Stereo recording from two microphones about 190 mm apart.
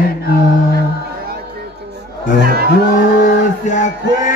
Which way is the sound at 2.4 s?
55° right (ahead or behind).